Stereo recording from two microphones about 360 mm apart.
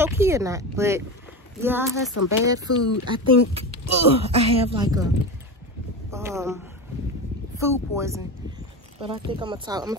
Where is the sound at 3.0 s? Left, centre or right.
Centre.